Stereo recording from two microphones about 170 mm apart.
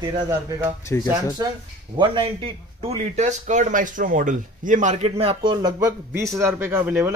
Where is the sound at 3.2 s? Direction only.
45° right (ahead or behind).